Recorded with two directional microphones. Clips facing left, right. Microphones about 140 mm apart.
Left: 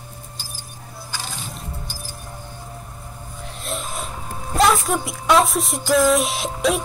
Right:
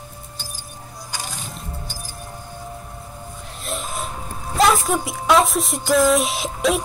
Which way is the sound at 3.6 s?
Centre (ahead or behind).